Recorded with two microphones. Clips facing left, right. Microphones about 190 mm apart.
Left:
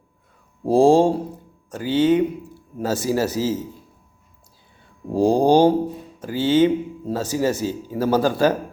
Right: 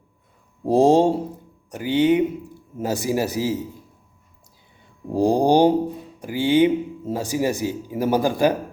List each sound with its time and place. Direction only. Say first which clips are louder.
0.7 s speech: left 1 dB; 20° right (ahead or behind)
5.1 s speech: left 1 dB; 15° right (ahead or behind)